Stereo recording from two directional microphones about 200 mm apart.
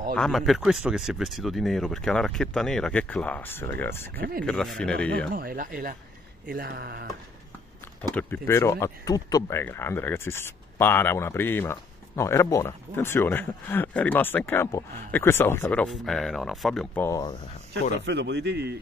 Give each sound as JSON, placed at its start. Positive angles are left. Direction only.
{"t": 0.1, "sound": "speech", "side_deg": 0}
{"t": 4.2, "sound": "speech", "side_deg": -45}
{"t": 4.5, "sound": "speech", "side_deg": 5}
{"t": 5.3, "sound": "speech", "side_deg": -45}
{"t": 8.1, "sound": "speech", "side_deg": 10}
{"t": 18.0, "sound": "speech", "side_deg": -60}